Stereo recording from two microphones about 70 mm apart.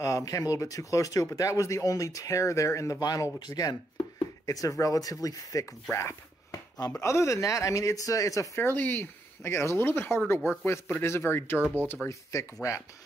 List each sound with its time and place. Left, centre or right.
0.0 s speech: left
3.0 s speech: left
4.5 s speech: left
5.9 s speech: left
8.5 s speech: left
12.1 s speech: left